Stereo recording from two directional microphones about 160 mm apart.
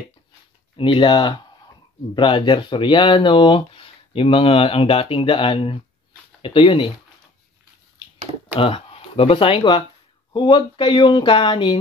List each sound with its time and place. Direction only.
0.7 s speech: 35° left (ahead or behind)
8.5 s speech: 35° left (ahead or behind)